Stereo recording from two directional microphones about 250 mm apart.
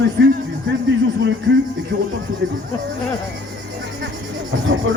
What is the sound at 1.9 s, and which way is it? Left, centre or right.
Speech, right.